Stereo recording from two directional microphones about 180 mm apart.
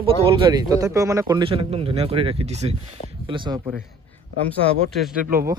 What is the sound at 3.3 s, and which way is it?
Speech, 25° right (ahead or behind).